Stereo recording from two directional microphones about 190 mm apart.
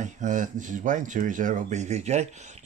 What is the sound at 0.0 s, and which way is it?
Speech, 40° right (ahead or behind).